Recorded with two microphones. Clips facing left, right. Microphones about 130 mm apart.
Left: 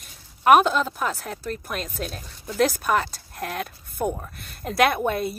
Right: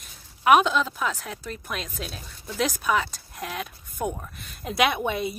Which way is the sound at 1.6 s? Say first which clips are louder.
Left 2 dB; centre (ahead or behind).